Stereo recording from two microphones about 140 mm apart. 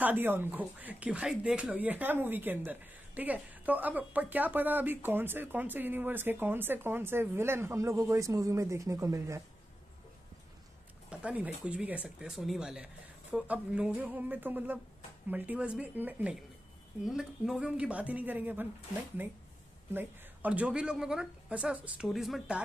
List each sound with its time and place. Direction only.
0.0 s speech: 15° right (ahead or behind)
11.1 s a sound: 10° right (ahead or behind)
11.6 s speech: 10° right (ahead or behind)
19.9 s speech: 15° right (ahead or behind)